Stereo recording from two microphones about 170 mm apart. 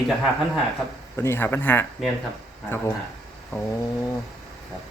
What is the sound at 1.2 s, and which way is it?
Speech, 15° left (ahead or behind).